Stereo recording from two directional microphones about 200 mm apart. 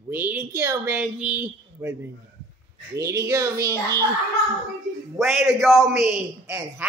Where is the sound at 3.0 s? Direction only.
15° right (ahead or behind).